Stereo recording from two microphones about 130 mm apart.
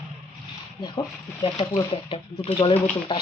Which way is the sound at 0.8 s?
40° left (ahead or behind).